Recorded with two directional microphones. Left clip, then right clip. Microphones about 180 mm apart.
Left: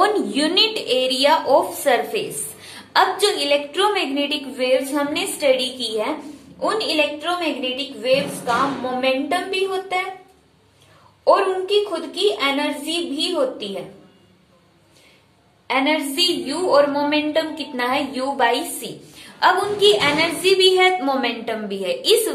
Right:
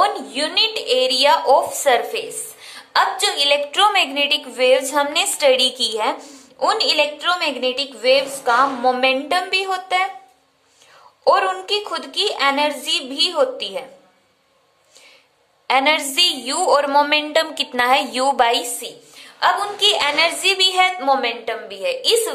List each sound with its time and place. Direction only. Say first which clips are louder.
0.0 s a woman's voice: left 1 dB; 10° right (ahead or behind)
3.4 s a woman's voice: right 3 dB; 35° right (ahead or behind); by 6.1 s 55° right (ahead or behind)
6.6 s a woman's voice: right 3 dB; 65° right (ahead or behind)
11.2 s a woman's voice: even; 65° right (ahead or behind)
15.6 s a woman's voice: right 3 dB; 60° right (ahead or behind)
18.8 s a woman's voice: even; 25° right (ahead or behind)